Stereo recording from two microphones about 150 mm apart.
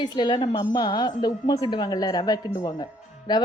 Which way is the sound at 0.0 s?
30° left (ahead or behind).